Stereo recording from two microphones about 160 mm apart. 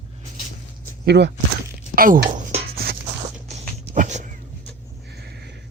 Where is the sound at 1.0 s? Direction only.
90° right.